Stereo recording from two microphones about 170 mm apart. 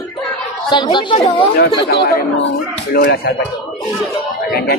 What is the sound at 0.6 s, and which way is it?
Speech, 25° left (ahead or behind).